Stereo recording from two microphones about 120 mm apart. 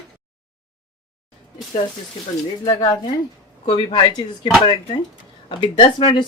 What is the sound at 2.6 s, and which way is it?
Speech, 35° left (ahead or behind).